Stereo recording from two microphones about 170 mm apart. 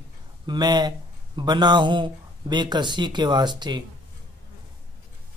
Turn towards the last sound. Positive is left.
turn(degrees=-25)  # may be behind; listen again after turning